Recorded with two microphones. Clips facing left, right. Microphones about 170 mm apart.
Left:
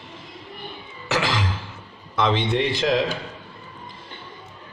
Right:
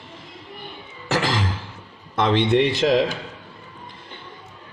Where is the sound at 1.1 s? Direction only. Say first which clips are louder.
Right 1 dB; 45° right (ahead or behind).